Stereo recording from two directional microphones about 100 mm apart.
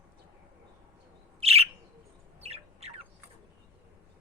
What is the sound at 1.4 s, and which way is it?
Bird, 90° right.